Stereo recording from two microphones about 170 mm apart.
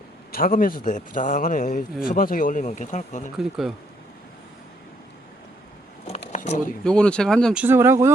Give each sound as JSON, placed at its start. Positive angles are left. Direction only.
{"t": 0.3, "sound": "a man's voice", "side_deg": 60}
{"t": 3.3, "sound": "speech", "side_deg": 0}
{"t": 6.1, "sound": "a sound", "side_deg": 35}
{"t": 6.8, "sound": "speech", "side_deg": 5}
{"t": 7.5, "sound": "speech", "side_deg": -10}